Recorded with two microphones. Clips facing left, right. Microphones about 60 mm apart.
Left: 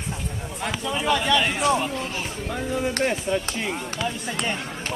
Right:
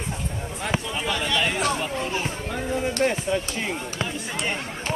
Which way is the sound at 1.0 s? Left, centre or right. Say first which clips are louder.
Left 6 dB; centre.